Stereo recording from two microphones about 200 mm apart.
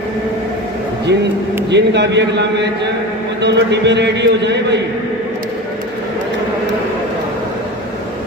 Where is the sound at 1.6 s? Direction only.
60° right (ahead or behind).